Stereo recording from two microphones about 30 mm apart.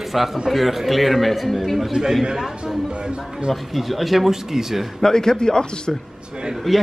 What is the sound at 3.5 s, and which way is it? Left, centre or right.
A man's voice, centre.